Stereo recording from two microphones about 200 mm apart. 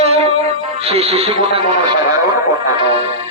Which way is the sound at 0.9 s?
30° right (ahead or behind).